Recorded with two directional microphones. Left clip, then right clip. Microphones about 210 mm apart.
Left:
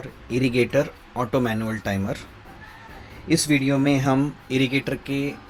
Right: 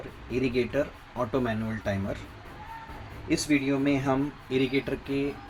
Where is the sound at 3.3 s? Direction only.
45° left (ahead or behind).